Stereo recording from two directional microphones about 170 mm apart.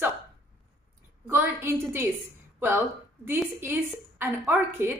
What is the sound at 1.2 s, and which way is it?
Speech, 10° right (ahead or behind).